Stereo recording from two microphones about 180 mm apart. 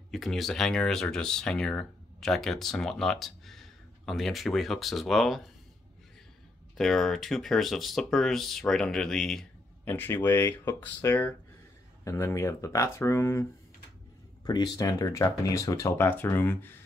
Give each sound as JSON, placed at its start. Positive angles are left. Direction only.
{"t": 0.1, "sound": "speech", "side_deg": 0}
{"t": 6.8, "sound": "speech", "side_deg": 0}